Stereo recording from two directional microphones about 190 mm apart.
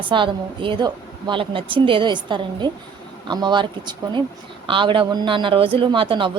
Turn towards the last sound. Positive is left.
turn(degrees=-25)  # may be behind; listen again after turning